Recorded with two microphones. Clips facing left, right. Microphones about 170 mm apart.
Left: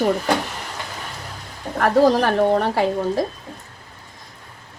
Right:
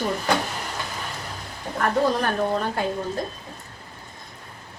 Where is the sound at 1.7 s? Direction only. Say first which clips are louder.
Left 6 dB; 85° left.